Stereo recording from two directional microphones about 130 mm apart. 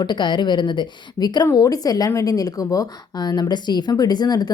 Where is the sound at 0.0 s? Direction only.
35° left (ahead or behind).